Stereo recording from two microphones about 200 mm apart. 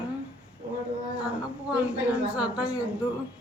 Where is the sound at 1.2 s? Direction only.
5° right (ahead or behind).